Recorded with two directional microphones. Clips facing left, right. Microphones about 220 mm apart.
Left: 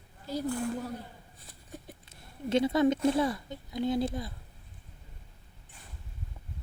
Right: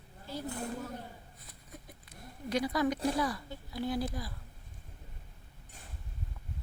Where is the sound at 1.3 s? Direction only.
30° left (ahead or behind).